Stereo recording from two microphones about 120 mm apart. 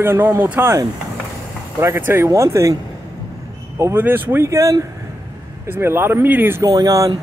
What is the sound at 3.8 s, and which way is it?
Speech, 20° right (ahead or behind).